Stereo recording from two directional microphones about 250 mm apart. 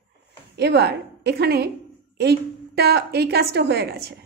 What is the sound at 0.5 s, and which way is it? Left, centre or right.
A woman's voice, right.